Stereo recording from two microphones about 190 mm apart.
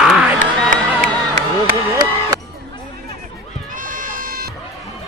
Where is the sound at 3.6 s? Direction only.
45° right (ahead or behind).